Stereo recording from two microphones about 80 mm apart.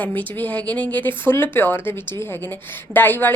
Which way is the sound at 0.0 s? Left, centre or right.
Left.